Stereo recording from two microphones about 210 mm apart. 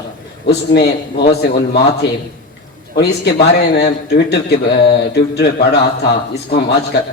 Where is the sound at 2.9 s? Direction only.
50° left (ahead or behind).